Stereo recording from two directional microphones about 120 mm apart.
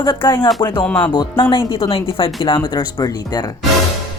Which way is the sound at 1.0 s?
40° left (ahead or behind).